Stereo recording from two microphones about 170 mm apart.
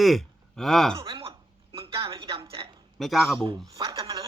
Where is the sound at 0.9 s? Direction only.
30° right (ahead or behind).